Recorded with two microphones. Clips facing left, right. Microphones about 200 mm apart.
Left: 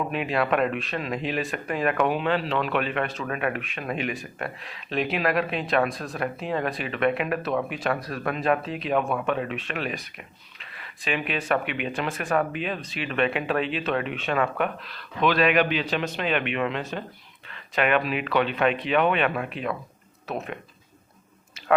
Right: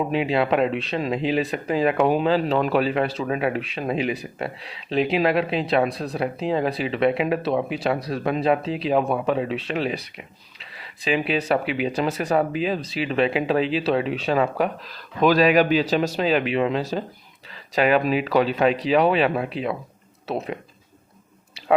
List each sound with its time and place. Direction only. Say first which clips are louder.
0.1 s speech: right 4 dB; 30° right (ahead or behind)